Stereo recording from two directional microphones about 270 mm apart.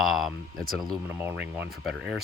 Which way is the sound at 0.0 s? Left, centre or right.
Centre.